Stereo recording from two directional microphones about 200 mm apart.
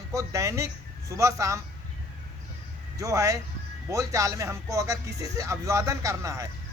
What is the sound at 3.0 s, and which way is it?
Speech, 15° right (ahead or behind).